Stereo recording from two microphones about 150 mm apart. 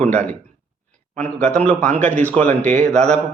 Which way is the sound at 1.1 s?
10° left (ahead or behind).